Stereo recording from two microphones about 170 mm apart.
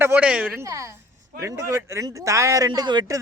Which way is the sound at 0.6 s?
20° right (ahead or behind).